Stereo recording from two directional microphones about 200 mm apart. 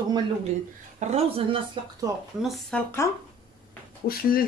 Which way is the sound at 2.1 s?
15° right (ahead or behind).